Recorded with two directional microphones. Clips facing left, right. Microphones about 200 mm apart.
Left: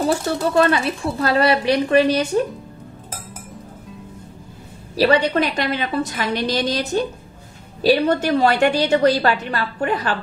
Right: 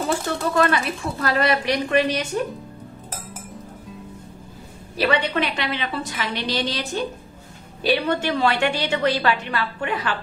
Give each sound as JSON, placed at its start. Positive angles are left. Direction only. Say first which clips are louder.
{"t": 0.6, "sound": "a woman's voice", "louder": "left 3 dB", "side_deg": 30}
{"t": 4.9, "sound": "a woman's voice", "louder": "left 5 dB", "side_deg": 35}